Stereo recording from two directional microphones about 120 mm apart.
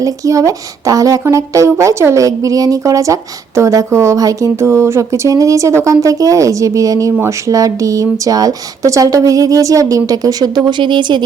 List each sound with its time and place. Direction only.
0.0 s speech: 25° right (ahead or behind)